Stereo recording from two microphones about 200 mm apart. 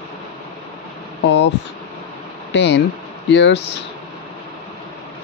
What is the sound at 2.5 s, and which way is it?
Speech, 60° left (ahead or behind).